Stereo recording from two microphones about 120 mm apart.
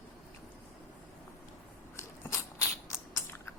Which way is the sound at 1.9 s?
25° left (ahead or behind).